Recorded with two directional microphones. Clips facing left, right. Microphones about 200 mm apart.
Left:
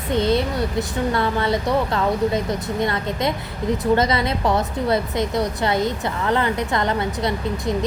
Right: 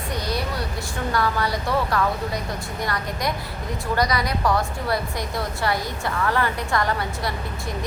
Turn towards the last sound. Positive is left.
turn(degrees=20)  # may be behind; listen again after turning